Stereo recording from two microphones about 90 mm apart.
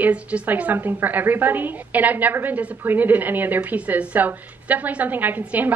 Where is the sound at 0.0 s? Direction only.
15° right (ahead or behind).